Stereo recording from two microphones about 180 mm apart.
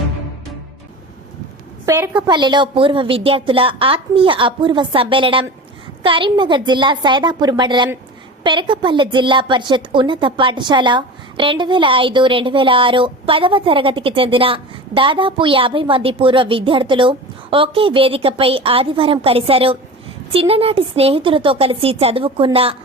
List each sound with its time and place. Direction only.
1.9 s a woman's voice: 10° right (ahead or behind)
2.2 s a woman's voice: 25° right (ahead or behind)